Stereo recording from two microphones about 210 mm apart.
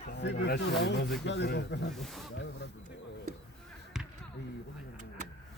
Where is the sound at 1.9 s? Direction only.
Centre (ahead or behind).